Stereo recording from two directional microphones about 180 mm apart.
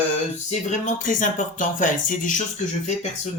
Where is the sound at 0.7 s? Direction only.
45° left (ahead or behind).